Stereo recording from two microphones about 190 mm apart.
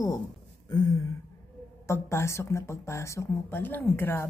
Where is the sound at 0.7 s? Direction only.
20° left (ahead or behind).